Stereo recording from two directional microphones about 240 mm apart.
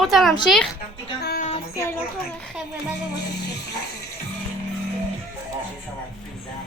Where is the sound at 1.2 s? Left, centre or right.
Left.